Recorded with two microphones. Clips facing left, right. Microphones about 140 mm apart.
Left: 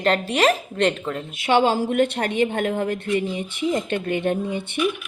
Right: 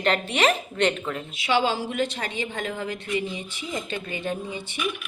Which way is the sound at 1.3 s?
50° left (ahead or behind).